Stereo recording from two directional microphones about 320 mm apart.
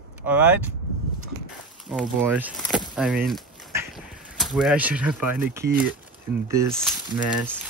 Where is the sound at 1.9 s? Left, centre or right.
Centre.